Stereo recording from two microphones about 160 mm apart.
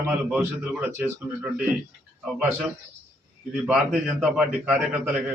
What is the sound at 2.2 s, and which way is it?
A man's voice, 5° right (ahead or behind).